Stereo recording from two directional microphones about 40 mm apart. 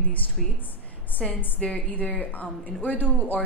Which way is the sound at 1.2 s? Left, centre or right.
Centre.